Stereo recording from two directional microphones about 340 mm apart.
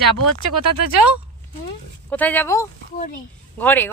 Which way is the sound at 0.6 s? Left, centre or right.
Right.